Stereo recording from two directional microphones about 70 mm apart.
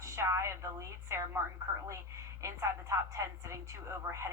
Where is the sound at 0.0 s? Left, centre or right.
Right.